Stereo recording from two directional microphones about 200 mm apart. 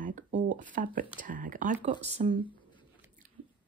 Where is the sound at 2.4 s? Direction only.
25° left (ahead or behind).